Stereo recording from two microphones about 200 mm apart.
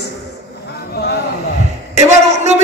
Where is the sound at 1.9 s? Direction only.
35° right (ahead or behind).